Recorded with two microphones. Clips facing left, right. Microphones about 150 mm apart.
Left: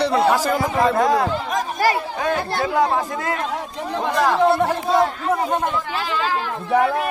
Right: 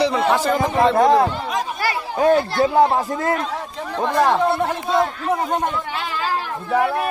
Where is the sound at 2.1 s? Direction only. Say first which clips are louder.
Right 6 dB; 30° right (ahead or behind).